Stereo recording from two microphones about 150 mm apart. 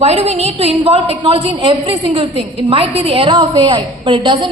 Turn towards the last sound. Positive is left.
turn(degrees=-30)  # may be behind; listen again after turning